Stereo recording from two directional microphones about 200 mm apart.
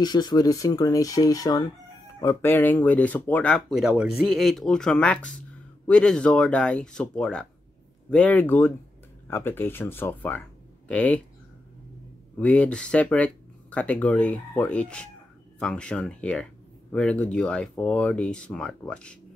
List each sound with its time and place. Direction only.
0.0 s speech: 20° left (ahead or behind)
12.4 s speech: 5° left (ahead or behind)